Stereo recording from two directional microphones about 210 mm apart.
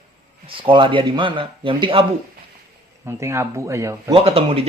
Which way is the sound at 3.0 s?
10° right (ahead or behind).